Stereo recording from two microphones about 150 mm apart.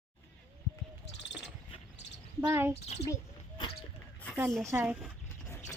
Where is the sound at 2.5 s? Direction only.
15° right (ahead or behind).